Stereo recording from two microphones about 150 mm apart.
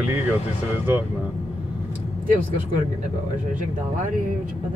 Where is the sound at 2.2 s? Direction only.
65° right (ahead or behind).